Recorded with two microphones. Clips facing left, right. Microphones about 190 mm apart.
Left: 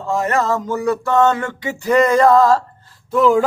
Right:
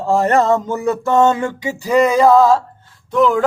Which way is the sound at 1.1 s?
20° right (ahead or behind).